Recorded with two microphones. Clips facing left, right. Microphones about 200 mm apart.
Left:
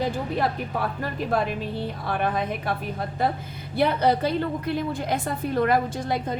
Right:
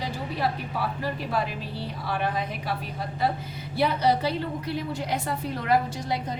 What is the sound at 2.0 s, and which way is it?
Speech, 55° left (ahead or behind).